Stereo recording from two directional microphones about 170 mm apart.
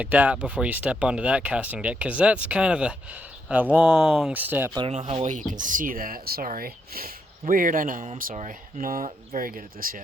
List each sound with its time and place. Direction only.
0.0 s speech: 10° right (ahead or behind)
4.9 s speech: 35° right (ahead or behind); by 10.0 s 55° right (ahead or behind)